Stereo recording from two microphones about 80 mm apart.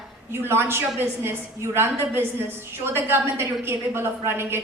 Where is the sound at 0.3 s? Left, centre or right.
Right.